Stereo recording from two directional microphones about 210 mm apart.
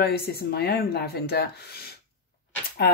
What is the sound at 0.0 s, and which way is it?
A woman's voice, 50° left (ahead or behind).